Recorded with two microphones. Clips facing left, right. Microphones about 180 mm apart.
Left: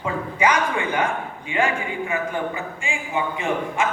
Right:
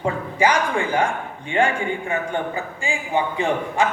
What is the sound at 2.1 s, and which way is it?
A man's voice, 30° right (ahead or behind).